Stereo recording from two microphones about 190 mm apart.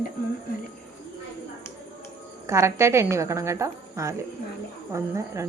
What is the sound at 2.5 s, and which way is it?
A woman's voice, 15° right (ahead or behind).